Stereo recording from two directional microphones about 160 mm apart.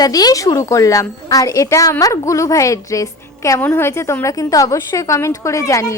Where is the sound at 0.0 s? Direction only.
25° left (ahead or behind).